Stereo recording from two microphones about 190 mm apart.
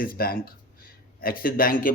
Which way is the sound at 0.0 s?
50° left (ahead or behind).